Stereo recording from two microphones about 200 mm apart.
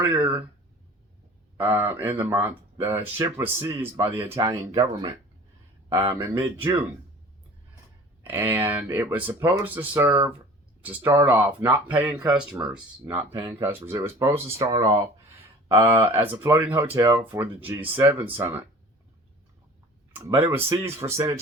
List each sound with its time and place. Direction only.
0.0 s speech: 10° right (ahead or behind)
1.5 s speech: 10° right (ahead or behind)
8.2 s speech: 10° right (ahead or behind)
20.1 s speech: 10° right (ahead or behind)